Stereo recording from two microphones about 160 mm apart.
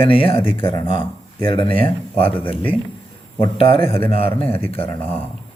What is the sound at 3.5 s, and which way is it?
Speech, 35° left (ahead or behind).